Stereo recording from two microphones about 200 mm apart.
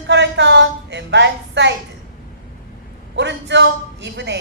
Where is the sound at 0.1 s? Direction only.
60° right (ahead or behind).